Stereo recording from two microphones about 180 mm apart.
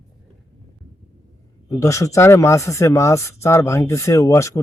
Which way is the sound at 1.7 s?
20° left (ahead or behind).